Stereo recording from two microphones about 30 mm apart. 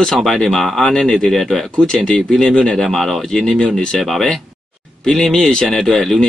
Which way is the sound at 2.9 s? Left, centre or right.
Centre.